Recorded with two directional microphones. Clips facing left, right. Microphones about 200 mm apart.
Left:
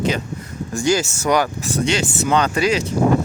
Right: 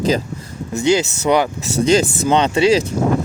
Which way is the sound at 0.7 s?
20° right (ahead or behind).